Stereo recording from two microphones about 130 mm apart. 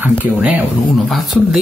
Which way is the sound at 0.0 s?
10° right (ahead or behind).